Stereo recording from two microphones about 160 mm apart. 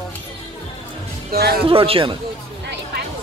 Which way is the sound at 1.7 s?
35° right (ahead or behind).